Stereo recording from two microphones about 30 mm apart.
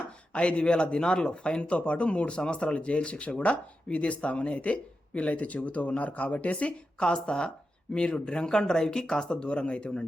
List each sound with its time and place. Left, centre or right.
0.3 s speech: left
7.0 s speech: left